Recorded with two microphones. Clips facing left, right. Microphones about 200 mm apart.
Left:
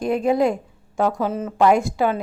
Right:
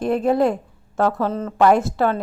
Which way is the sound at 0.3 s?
10° left (ahead or behind).